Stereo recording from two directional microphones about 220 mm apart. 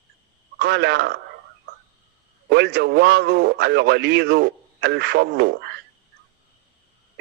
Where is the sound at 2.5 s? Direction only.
50° right (ahead or behind).